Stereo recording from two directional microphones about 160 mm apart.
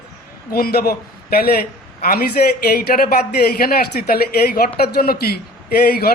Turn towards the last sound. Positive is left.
turn(degrees=75)  # may be behind; listen again after turning